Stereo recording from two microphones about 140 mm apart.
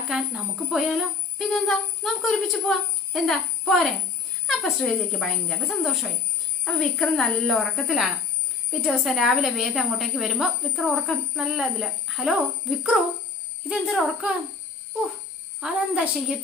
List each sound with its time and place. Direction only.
0.1 s a woman's voice: 5° right (ahead or behind)
15.6 s a woman's voice: 5° right (ahead or behind)